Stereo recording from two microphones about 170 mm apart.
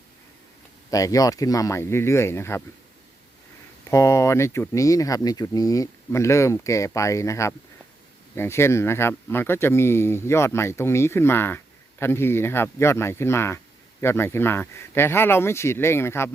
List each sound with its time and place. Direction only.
0.9 s speech: 20° left (ahead or behind)
3.8 s speech: 15° left (ahead or behind)